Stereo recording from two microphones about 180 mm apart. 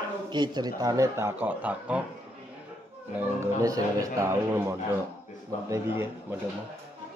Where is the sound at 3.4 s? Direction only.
15° right (ahead or behind).